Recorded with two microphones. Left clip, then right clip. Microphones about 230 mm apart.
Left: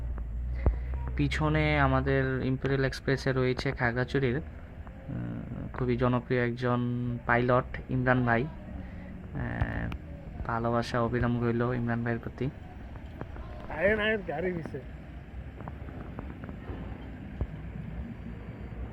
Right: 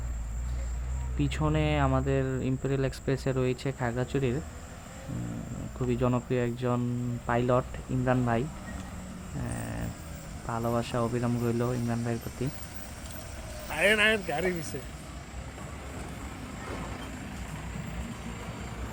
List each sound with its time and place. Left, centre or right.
1.3 s speech: centre
5.8 s speech: centre
13.7 s speech: centre